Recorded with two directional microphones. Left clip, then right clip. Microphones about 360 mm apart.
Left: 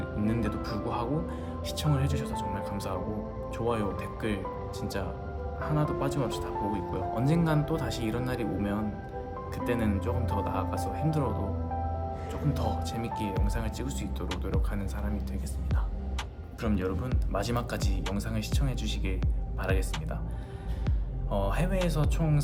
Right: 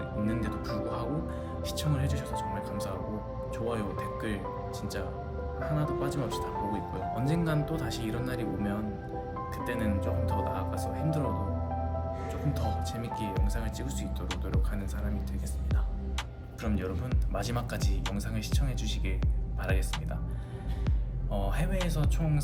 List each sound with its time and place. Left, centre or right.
0.3 s speech: centre
5.6 s speech: centre
12.3 s speech: centre
16.6 s speech: centre
21.3 s speech: centre